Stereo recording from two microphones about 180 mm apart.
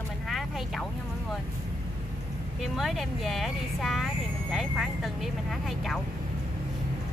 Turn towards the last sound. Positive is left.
turn(degrees=0)  # may be behind; listen again after turning